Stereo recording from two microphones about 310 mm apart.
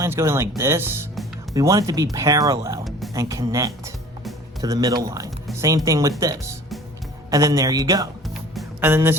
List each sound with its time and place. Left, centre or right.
0.0 s a man's voice: centre
8.5 s music: centre